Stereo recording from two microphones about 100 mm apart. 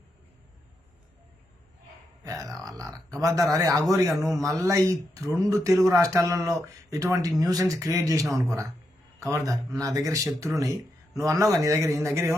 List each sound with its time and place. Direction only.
2.2 s grunt: 35° right (ahead or behind)
3.1 s a man's voice: 35° right (ahead or behind)